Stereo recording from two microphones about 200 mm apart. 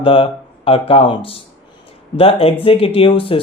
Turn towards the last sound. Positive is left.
turn(degrees=25)  # may be behind; listen again after turning